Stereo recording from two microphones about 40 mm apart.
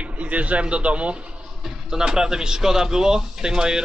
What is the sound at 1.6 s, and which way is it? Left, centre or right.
A man's voice, centre.